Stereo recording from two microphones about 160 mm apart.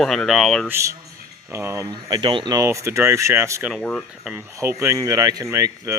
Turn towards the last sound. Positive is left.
turn(degrees=-20)  # may be behind; listen again after turning